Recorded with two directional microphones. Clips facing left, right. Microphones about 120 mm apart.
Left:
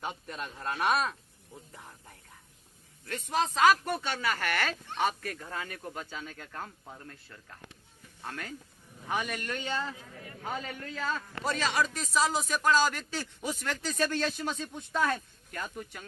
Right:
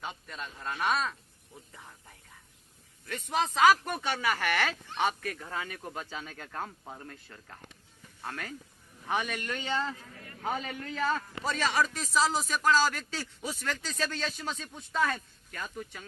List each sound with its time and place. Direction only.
0.0 s speech: 10° left (ahead or behind); by 4.4 s 15° right (ahead or behind)
4.5 s speech: 5° right (ahead or behind)
8.2 s speech: 5° right (ahead or behind)
9.6 s a man's voice: 20° right (ahead or behind)
9.9 s speech: 10° left (ahead or behind)
10.4 s a man's voice: 20° right (ahead or behind)
11.6 s speech: centre (ahead or behind)